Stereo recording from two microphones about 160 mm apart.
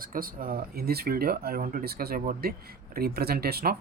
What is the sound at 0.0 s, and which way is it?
Speech, 65° right (ahead or behind).